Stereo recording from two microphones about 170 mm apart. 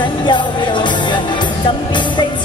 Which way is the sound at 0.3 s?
25° left (ahead or behind).